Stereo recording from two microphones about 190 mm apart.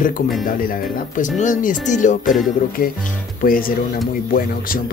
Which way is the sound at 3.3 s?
50° left (ahead or behind).